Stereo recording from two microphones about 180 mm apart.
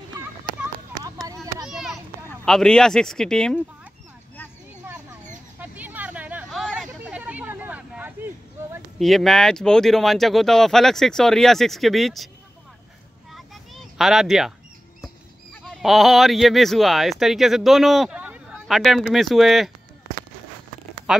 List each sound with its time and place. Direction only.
1.2 s a sound: 20° right (ahead or behind)
1.7 s children playing: 5° right (ahead or behind)
2.2 s speech: 5° left (ahead or behind)
5.6 s hubbub: 10° right (ahead or behind)
9.0 s speech: centre (ahead or behind)
13.3 s a sound: centre (ahead or behind)
15.6 s speech: centre (ahead or behind)
21.1 s speech: centre (ahead or behind)